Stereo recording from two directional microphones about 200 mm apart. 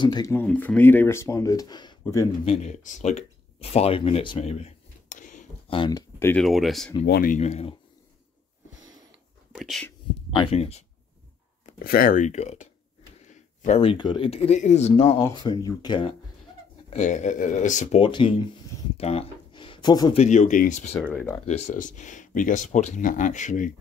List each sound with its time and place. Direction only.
0.0 s speech: 20° left (ahead or behind)
2.4 s speech: 30° left (ahead or behind)
3.7 s a sound: 30° left (ahead or behind)
5.7 s speech: 20° left (ahead or behind)
6.4 s speech: centre (ahead or behind)
7.1 s speech: 45° left (ahead or behind)
9.5 s speech: centre (ahead or behind)
10.3 s speech: 30° left (ahead or behind)
11.6 s speech: 45° left (ahead or behind); by 16.1 s 20° left (ahead or behind)
16.9 s speech: 35° left (ahead or behind)
18.0 s speech: 25° left (ahead or behind)
20.2 s speech: 35° left (ahead or behind)
21.1 s speech: 5° left (ahead or behind)
21.5 s speech: 35° left (ahead or behind)